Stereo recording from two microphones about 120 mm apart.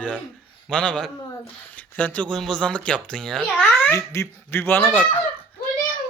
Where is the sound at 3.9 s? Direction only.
25° left (ahead or behind).